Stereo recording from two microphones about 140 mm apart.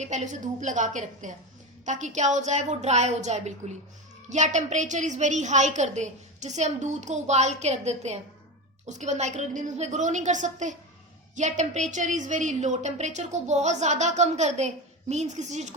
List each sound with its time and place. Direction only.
0.0 s a woman's voice: 55° right (ahead or behind)